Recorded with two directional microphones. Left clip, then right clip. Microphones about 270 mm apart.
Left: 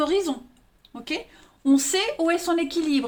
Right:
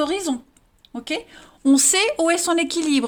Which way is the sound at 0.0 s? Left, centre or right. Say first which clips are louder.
Even; right.